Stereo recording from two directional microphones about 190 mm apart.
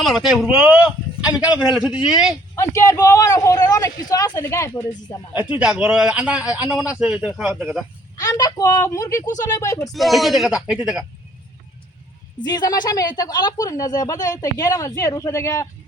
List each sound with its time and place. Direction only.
0.0 s a man's voice: centre (ahead or behind)
2.6 s speech: 15° left (ahead or behind)
5.3 s a man's voice: 5° right (ahead or behind)
8.1 s speech: 20° left (ahead or behind)
9.9 s a man's voice: centre (ahead or behind)
12.4 s speech: 20° left (ahead or behind)